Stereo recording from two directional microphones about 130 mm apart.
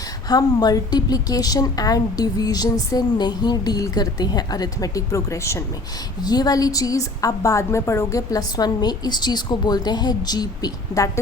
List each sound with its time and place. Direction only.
0.3 s speech: 30° left (ahead or behind)